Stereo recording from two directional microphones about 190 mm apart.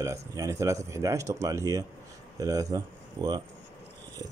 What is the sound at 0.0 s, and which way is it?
Speech, 15° right (ahead or behind).